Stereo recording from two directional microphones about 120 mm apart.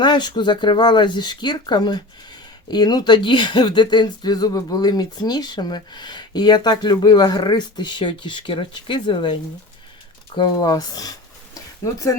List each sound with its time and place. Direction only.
0.0 s speech: 40° left (ahead or behind)